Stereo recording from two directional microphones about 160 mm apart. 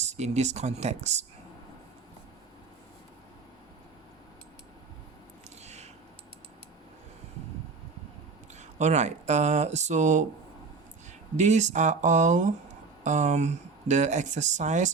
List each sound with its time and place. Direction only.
0.0 s speech: 45° right (ahead or behind)
5.6 s a sound: 45° right (ahead or behind)
8.5 s speech: 45° right (ahead or behind)
11.3 s speech: 45° right (ahead or behind)